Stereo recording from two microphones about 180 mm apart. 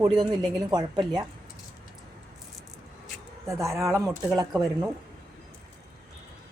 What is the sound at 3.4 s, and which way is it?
Speech, 15° right (ahead or behind).